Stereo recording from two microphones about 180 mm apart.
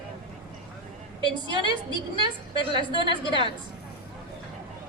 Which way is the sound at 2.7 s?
25° right (ahead or behind).